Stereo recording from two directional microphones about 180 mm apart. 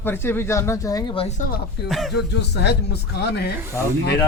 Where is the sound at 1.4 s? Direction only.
55° left (ahead or behind).